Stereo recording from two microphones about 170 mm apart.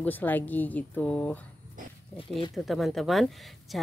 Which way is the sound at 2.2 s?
30° left (ahead or behind).